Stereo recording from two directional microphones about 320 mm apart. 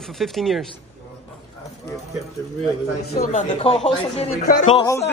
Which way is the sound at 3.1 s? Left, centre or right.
Left.